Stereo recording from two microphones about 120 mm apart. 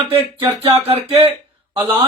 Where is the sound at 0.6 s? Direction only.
50° right (ahead or behind).